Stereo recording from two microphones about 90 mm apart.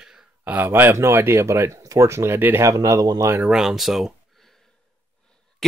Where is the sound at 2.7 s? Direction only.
35° right (ahead or behind).